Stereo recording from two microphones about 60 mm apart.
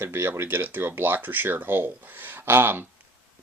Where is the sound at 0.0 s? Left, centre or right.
Right.